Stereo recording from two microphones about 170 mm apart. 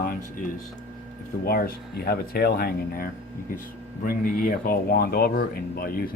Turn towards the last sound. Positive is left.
turn(degrees=60)  # may be behind; listen again after turning